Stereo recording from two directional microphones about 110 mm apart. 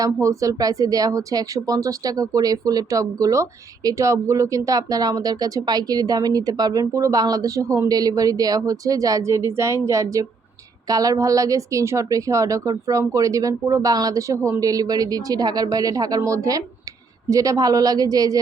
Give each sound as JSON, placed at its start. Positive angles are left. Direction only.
{"t": 0.0, "sound": "speech", "side_deg": -30}